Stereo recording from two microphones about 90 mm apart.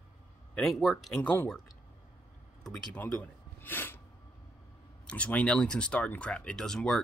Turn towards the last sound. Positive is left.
turn(degrees=5)  # may be behind; listen again after turning